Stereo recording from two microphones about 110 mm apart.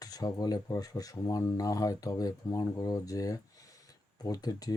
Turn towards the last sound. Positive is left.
turn(degrees=35)  # may be behind; listen again after turning